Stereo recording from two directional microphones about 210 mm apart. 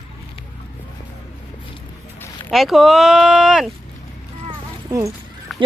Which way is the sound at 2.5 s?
Centre (ahead or behind).